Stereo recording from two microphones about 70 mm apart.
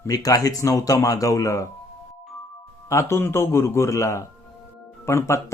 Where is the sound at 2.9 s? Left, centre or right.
Left.